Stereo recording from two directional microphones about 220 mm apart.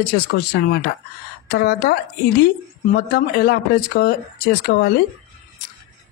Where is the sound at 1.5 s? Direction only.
45° left (ahead or behind).